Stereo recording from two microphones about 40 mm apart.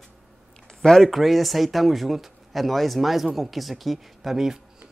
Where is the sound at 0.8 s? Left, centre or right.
Centre.